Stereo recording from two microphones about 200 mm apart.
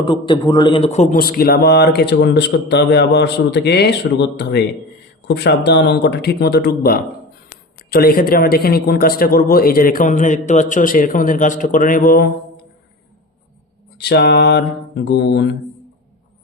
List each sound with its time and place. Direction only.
0.0 s a man's voice: 25° left (ahead or behind)
1.2 s a man's voice: 50° left (ahead or behind)
14.0 s speech: 55° left (ahead or behind)